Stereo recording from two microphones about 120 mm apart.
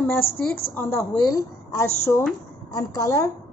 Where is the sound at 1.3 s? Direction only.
25° left (ahead or behind).